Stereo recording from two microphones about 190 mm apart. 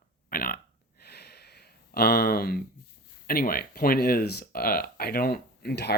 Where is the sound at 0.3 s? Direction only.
50° left (ahead or behind).